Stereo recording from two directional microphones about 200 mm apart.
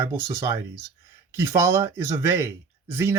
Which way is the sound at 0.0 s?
10° right (ahead or behind).